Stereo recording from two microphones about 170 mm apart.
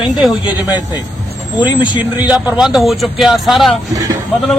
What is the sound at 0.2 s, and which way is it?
Speech, 5° right (ahead or behind).